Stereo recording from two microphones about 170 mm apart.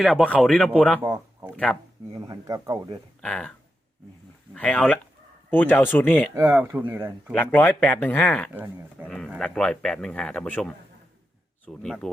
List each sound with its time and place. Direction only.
0.0 s speech: centre (ahead or behind)
1.0 s a sound: 15° right (ahead or behind)
2.1 s speech: 20° right (ahead or behind)
3.2 s speech: 5° left (ahead or behind)
4.5 s speech: 5° left (ahead or behind)
6.3 s speech: 10° right (ahead or behind)
7.3 s speech: 10° left (ahead or behind)
8.5 s speech: 10° right (ahead or behind)
9.0 s speech: 5° left (ahead or behind)